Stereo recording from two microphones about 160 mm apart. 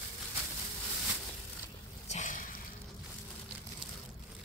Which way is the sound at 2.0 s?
50° left (ahead or behind).